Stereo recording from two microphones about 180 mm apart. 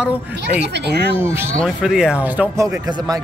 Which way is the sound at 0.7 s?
65° right (ahead or behind).